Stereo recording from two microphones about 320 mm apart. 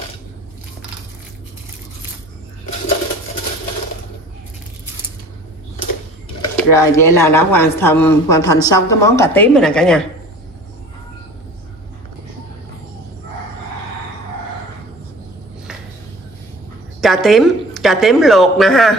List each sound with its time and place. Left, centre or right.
6.5 s speech: centre
17.0 s a woman's voice: centre